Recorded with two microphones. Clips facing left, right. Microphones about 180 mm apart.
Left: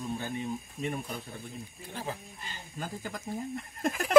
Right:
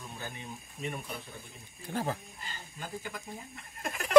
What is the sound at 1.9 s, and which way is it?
Speech, 45° right (ahead or behind).